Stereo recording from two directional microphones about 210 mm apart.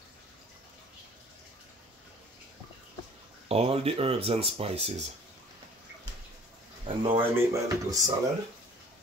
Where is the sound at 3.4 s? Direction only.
30° right (ahead or behind).